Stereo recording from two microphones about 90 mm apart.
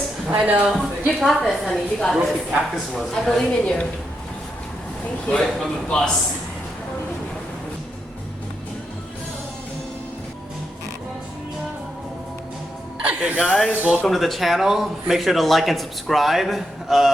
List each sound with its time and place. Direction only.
0.3 s speech: 20° right (ahead or behind)
0.8 s speech: centre (ahead or behind)
2.1 s speech: 10° right (ahead or behind)
2.9 s a man's voice: 10° left (ahead or behind)
5.3 s a man's voice: 10° left (ahead or behind)
13.0 s speech: 15° right (ahead or behind)
14.0 s speech: centre (ahead or behind)